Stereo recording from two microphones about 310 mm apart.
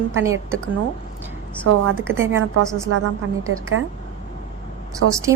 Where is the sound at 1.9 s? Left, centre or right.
Centre.